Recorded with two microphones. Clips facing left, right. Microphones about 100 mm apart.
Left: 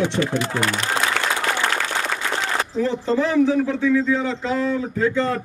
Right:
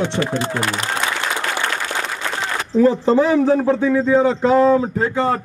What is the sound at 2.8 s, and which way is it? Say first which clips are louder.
Speech: right 7 dB; 55° right (ahead or behind).